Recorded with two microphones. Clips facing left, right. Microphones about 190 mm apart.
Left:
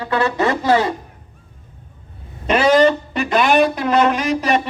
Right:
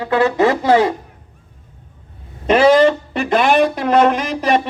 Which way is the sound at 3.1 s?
55° right (ahead or behind).